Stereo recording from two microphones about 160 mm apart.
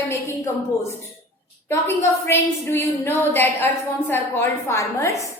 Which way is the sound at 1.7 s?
15° left (ahead or behind).